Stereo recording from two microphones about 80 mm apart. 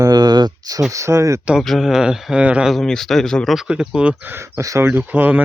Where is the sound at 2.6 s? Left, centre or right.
Centre.